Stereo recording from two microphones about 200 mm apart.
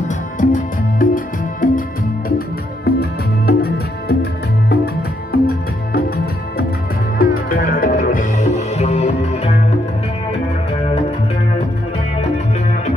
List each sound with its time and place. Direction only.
0.4 s music: 40° left (ahead or behind)
7.2 s music: 45° left (ahead or behind)